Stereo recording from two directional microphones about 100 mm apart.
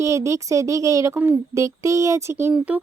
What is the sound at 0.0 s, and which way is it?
Child singing, 30° right (ahead or behind).